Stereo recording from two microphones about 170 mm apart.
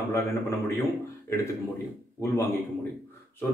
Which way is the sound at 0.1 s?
15° left (ahead or behind).